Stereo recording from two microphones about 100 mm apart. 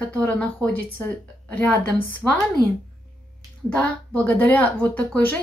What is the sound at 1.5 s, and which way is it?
Speech, 15° left (ahead or behind).